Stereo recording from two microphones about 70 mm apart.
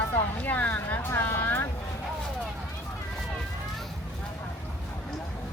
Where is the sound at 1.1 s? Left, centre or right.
Left.